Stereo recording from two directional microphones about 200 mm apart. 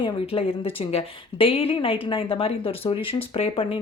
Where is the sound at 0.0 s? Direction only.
30° left (ahead or behind).